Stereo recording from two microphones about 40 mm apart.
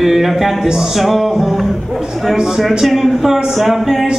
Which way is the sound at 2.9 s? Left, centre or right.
Centre.